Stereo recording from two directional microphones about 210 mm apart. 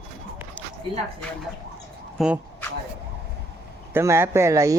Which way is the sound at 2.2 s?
Centre (ahead or behind).